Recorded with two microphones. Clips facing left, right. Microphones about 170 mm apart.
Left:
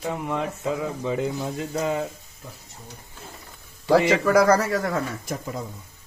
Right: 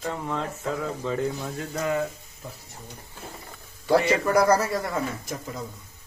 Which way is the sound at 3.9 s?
90° left.